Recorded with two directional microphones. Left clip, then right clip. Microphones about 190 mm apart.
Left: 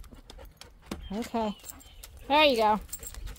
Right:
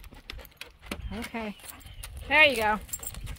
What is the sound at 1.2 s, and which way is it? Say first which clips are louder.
Speech: left 6 dB; 35° left (ahead or behind).